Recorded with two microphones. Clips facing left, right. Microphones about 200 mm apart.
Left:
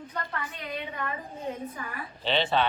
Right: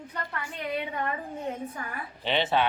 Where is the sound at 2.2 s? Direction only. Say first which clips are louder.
Even; 15° right (ahead or behind).